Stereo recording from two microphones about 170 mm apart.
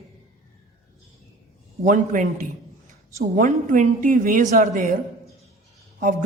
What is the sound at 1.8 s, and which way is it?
A man's voice, 50° right (ahead or behind).